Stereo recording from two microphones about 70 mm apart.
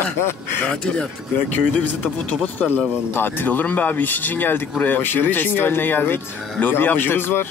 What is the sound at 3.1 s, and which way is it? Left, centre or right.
Speech, left.